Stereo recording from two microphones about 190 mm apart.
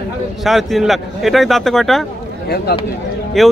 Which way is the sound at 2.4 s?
55° left (ahead or behind).